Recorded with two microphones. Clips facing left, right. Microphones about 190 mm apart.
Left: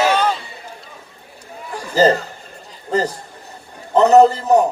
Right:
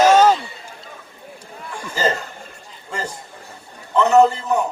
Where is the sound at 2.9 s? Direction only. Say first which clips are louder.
Left 9 dB; 40° left (ahead or behind).